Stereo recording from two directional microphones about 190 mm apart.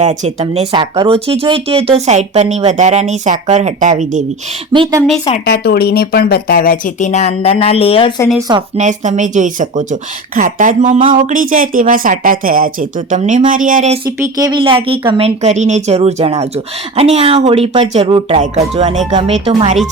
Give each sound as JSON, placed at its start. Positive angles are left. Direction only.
{"t": 0.0, "sound": "speech", "side_deg": -40}
{"t": 4.7, "sound": "speech", "side_deg": -20}
{"t": 5.5, "sound": "speech", "side_deg": 55}
{"t": 8.4, "sound": "speech", "side_deg": -25}
{"t": 8.8, "sound": "speech", "side_deg": -40}
{"t": 14.2, "sound": "speech", "side_deg": -20}